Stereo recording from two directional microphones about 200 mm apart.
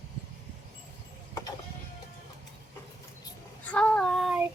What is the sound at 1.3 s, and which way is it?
Vehicle, 15° left (ahead or behind).